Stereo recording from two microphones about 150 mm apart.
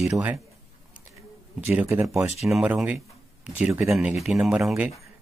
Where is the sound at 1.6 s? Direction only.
15° right (ahead or behind).